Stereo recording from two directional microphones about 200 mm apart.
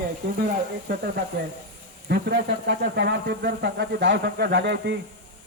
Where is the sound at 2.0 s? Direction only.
55° right (ahead or behind).